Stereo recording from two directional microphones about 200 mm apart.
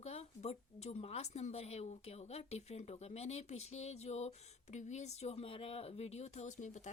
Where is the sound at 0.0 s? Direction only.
30° left (ahead or behind).